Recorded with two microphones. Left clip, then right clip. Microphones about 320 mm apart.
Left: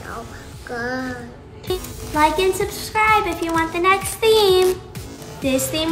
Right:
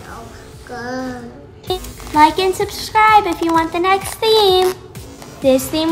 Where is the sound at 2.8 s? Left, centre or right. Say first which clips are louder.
Right 6 dB; right.